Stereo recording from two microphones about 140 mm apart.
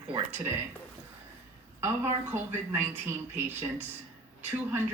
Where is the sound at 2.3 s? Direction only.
15° right (ahead or behind).